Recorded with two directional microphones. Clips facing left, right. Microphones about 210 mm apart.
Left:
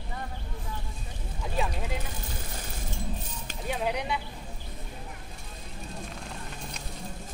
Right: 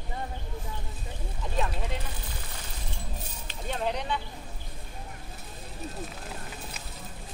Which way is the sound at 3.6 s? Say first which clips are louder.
Left 1 dB; 10° left (ahead or behind).